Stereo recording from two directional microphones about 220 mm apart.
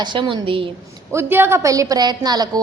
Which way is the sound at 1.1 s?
10° right (ahead or behind).